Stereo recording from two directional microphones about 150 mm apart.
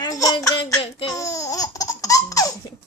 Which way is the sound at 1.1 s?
20° left (ahead or behind).